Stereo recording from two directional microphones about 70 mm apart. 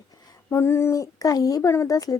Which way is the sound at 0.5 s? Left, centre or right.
Left.